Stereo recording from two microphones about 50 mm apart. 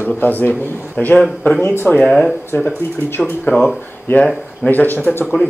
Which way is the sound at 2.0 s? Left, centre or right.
Centre.